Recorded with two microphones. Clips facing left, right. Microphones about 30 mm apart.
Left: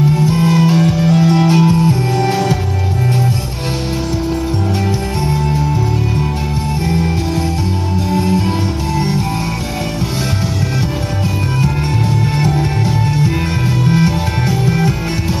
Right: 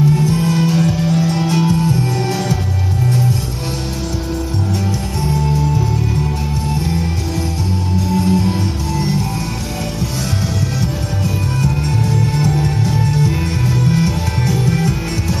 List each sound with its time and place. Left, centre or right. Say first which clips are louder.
0.1 s music: left 2 dB; centre
8.3 s music: left 1 dB; centre
12.2 s music: left 1 dB; centre